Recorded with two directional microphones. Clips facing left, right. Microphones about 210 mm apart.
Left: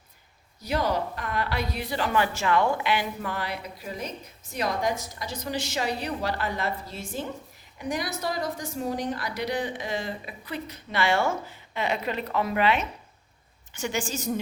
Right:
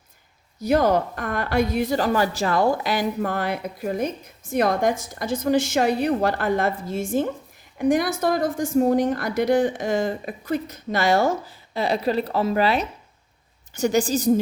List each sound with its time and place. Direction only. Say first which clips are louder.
0.6 s a woman's voice: right 8 dB; 50° right (ahead or behind)